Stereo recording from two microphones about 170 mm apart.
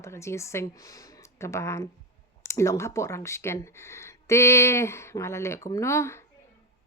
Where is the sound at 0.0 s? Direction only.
15° left (ahead or behind).